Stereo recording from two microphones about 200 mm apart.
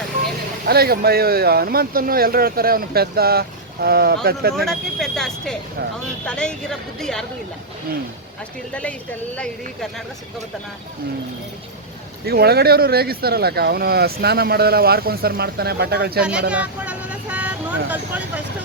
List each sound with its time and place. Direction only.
0.7 s speech: 50° right (ahead or behind)
4.5 s speech: centre (ahead or behind)
8.7 s speech: 5° left (ahead or behind)
12.2 s speech: 50° right (ahead or behind)
16.5 s speech: 5° right (ahead or behind)